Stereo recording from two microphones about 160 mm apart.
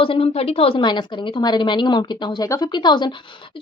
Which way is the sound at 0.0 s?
35° left (ahead or behind).